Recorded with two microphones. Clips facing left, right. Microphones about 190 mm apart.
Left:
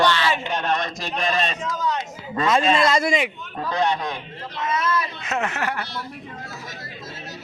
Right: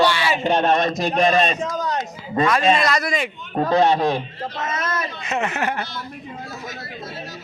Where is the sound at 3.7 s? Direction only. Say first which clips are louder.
Right 6 dB; 25° right (ahead or behind).